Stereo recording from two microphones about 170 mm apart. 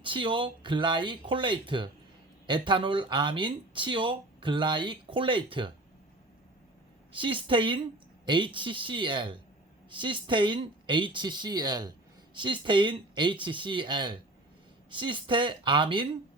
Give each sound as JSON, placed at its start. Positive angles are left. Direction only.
{"t": 0.0, "sound": "speech", "side_deg": -30}
{"t": 7.1, "sound": "speech", "side_deg": -30}